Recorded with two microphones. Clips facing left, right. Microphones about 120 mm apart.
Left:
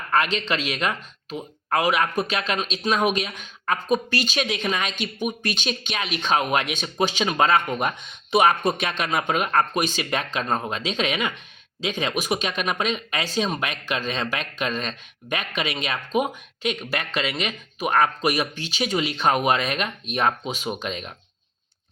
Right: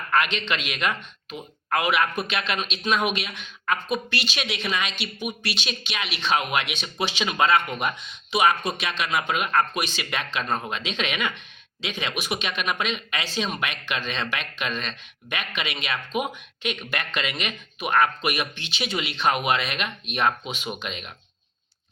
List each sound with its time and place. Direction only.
0.1 s speech: 35° left (ahead or behind)